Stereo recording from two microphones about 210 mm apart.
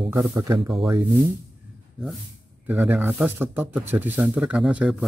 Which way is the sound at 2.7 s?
10° right (ahead or behind).